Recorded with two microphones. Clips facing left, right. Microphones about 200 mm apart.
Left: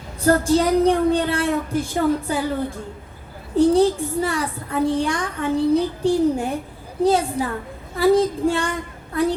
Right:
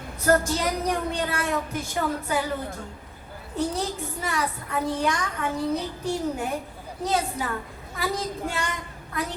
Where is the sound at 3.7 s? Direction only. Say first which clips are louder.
Left 13 dB; 30° left (ahead or behind).